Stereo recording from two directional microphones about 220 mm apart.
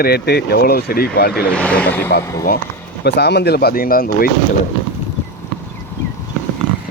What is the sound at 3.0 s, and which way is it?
Speech, 50° left (ahead or behind).